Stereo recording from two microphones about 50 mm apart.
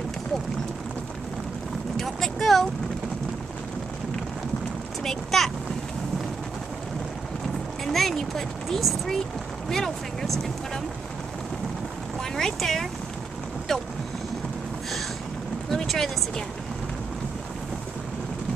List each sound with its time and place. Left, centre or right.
2.0 s speech: centre
5.0 s speech: centre
7.8 s speech: centre
12.4 s speech: centre
15.7 s speech: centre